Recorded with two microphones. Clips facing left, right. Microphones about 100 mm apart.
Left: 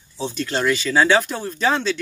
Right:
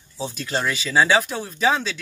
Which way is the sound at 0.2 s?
5° right (ahead or behind).